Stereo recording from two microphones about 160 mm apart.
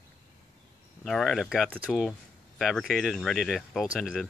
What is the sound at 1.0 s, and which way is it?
Speech, centre (ahead or behind).